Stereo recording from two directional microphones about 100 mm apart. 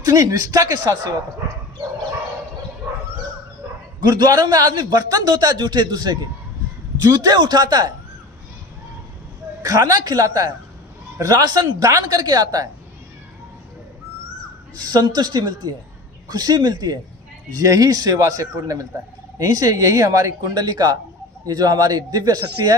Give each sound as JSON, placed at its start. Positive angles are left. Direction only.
{"t": 0.0, "sound": "speech", "side_deg": -40}
{"t": 4.0, "sound": "a man's voice", "side_deg": -45}
{"t": 9.6, "sound": "speech", "side_deg": -40}
{"t": 14.8, "sound": "a man's voice", "side_deg": -40}